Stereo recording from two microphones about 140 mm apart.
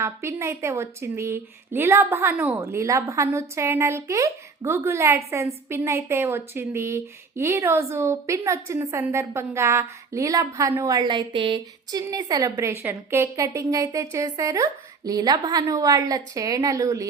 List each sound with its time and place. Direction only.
0.0 s speech: 20° right (ahead or behind)